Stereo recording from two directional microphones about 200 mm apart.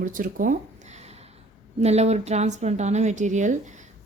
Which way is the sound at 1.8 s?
30° right (ahead or behind).